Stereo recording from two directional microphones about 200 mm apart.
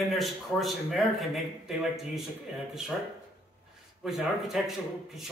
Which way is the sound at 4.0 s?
Centre (ahead or behind).